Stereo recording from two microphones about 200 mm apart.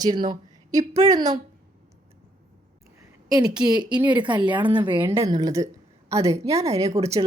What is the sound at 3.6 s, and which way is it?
Speech, 20° right (ahead or behind).